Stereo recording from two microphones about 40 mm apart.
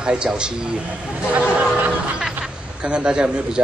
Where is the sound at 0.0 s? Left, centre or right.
Right.